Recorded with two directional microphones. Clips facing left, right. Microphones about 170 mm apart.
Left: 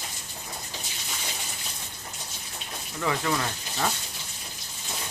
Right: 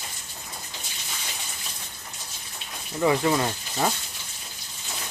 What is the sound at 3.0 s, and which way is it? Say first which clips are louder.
Speech: right 6 dB; 25° right (ahead or behind).